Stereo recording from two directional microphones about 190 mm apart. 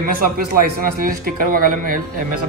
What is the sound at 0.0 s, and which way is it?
Speech, 50° right (ahead or behind).